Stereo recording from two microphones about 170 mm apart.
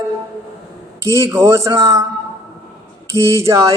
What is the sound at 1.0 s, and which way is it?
Mantra, 15° right (ahead or behind).